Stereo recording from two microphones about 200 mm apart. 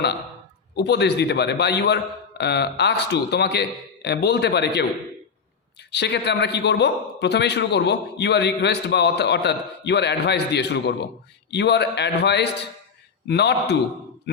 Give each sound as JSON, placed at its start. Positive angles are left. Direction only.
{"t": 0.8, "sound": "a man's voice", "side_deg": 55}
{"t": 5.9, "sound": "a man's voice", "side_deg": 55}